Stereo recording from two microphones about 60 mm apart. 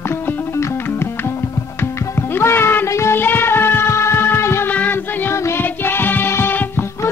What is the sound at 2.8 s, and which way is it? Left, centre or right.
Child singing, left.